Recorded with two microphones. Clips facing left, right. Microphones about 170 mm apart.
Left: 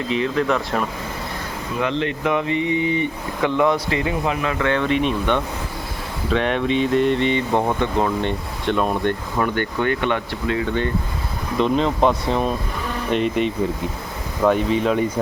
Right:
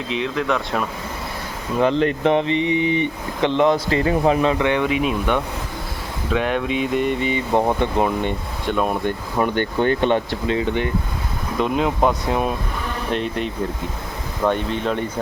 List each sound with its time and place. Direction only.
0.1 s speech: centre (ahead or behind)
1.8 s speech: 40° right (ahead or behind)
4.5 s speech: 15° right (ahead or behind)
9.4 s speech: 30° right (ahead or behind)
11.6 s speech: 5° right (ahead or behind)